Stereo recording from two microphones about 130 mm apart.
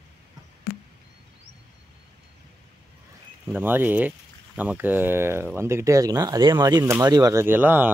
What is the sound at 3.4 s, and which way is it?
Speech, 15° right (ahead or behind).